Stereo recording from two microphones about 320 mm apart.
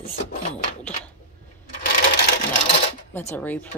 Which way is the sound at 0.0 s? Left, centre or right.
Left.